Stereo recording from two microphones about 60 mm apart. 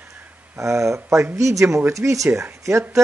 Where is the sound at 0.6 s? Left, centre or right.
Right.